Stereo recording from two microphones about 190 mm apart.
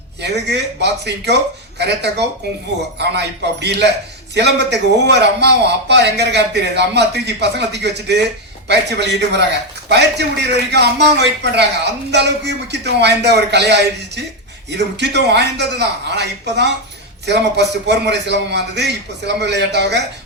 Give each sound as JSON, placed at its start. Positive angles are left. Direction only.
{"t": 0.2, "sound": "a man's voice", "side_deg": -65}